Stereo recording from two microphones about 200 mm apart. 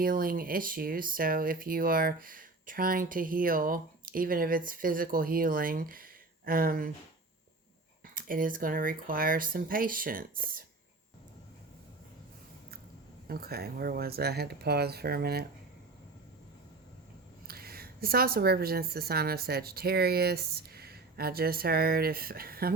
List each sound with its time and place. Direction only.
0.0 s speech: 45° right (ahead or behind)
8.1 s speech: 45° right (ahead or behind)
13.2 s speech: 50° right (ahead or behind)
17.5 s a woman's voice: 50° right (ahead or behind)